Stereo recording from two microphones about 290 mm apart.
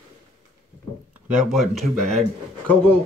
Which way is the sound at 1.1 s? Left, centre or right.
Centre.